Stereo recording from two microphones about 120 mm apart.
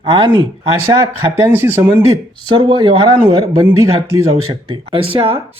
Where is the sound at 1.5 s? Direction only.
15° right (ahead or behind).